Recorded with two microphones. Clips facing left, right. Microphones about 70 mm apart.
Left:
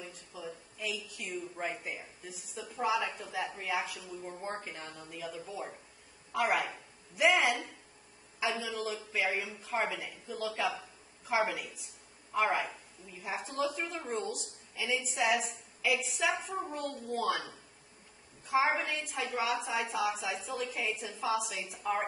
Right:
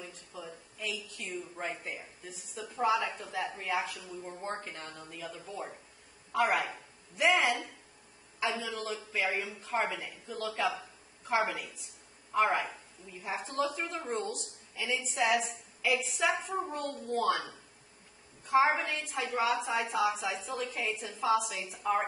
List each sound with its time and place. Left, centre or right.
0.0 s a sound: centre
1.4 s a woman's voice: centre
7.4 s speech: right
8.4 s a woman's voice: centre
10.8 s a sound: centre
12.4 s a woman's voice: centre
18.4 s a woman's voice: centre